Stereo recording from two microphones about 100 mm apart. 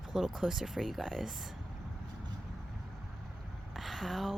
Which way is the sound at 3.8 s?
Centre (ahead or behind).